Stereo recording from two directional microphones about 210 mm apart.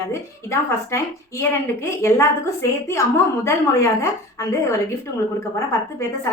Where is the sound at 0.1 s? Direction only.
15° left (ahead or behind).